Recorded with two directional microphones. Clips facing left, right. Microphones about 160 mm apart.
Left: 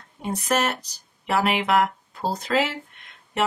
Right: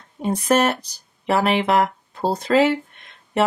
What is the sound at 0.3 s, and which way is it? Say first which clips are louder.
Speech: right 6 dB; 30° right (ahead or behind).